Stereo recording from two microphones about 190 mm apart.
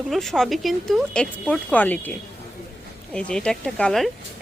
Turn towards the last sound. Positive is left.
turn(degrees=5)  # may be behind; listen again after turning